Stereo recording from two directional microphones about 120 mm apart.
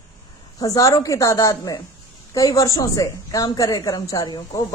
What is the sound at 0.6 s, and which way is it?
A woman's voice, 30° left (ahead or behind).